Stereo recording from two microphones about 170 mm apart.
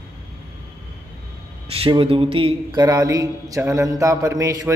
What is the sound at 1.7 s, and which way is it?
Speech, 35° right (ahead or behind).